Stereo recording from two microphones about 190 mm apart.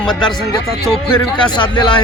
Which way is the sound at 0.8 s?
5° left (ahead or behind).